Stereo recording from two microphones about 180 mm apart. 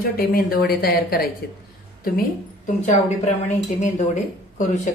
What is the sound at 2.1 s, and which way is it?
Speech, 45° left (ahead or behind).